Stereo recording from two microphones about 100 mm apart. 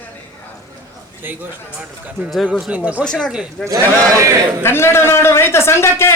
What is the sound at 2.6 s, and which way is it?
Speech, 15° right (ahead or behind).